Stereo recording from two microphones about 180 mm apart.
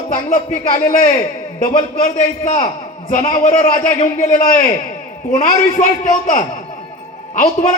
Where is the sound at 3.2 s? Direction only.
50° left (ahead or behind).